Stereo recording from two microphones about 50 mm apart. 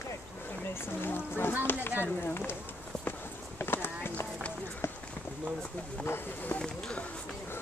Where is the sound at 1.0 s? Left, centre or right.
Left.